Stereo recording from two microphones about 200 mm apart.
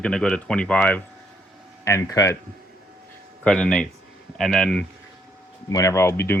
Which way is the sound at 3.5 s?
5° left (ahead or behind).